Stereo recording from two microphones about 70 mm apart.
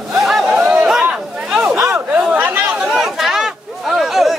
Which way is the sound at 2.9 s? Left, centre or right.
Centre.